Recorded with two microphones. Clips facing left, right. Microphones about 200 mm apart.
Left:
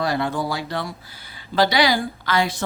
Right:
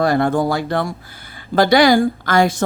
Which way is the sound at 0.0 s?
50° right (ahead or behind).